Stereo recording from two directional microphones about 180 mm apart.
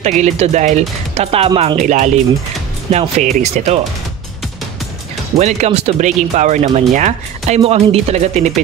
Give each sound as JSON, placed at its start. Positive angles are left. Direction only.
{"t": 0.0, "sound": "speech", "side_deg": -40}
{"t": 1.8, "sound": "speech", "side_deg": -45}
{"t": 5.4, "sound": "speech", "side_deg": -35}